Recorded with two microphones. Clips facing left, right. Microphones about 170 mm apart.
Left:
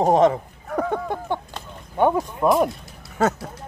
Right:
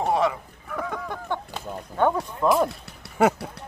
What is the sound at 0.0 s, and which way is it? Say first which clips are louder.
Speech: left 7 dB; 40° left (ahead or behind).